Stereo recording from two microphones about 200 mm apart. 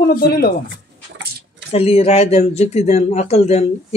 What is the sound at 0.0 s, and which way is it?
Speech, 45° left (ahead or behind).